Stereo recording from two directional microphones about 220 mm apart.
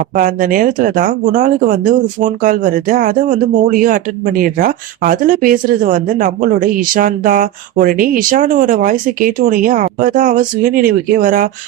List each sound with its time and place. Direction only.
0.2 s speech: 40° right (ahead or behind)